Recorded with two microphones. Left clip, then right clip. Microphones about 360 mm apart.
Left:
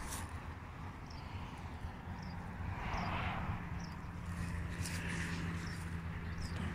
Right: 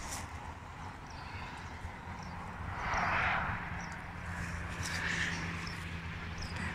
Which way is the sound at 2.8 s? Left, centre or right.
Right.